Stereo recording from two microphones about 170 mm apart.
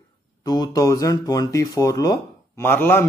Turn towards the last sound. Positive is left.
turn(degrees=10)  # may be behind; listen again after turning